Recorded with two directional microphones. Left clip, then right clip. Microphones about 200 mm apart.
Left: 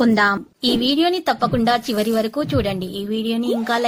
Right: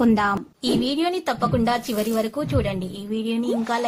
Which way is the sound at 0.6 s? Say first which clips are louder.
Left 6 dB; 25° left (ahead or behind).